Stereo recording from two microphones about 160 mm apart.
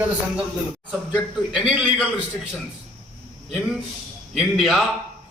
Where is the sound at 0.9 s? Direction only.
5° right (ahead or behind).